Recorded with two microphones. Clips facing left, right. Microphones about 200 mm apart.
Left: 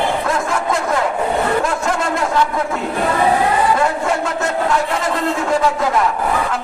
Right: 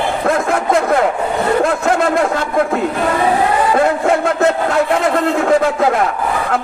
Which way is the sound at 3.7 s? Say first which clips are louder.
Right 4 dB; 60° right (ahead or behind).